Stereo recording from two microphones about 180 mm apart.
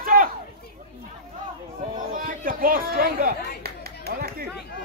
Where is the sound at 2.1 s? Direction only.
50° right (ahead or behind).